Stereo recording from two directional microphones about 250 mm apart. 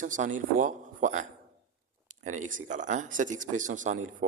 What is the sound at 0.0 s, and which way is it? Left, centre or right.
Speech, right.